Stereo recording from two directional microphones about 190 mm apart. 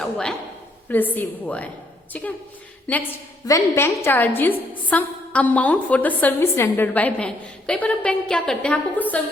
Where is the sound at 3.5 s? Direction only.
15° left (ahead or behind).